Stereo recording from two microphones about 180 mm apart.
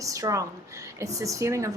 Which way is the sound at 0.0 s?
20° right (ahead or behind).